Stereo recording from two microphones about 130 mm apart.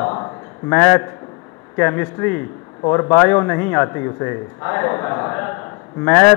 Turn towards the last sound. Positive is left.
turn(degrees=15)  # may be behind; listen again after turning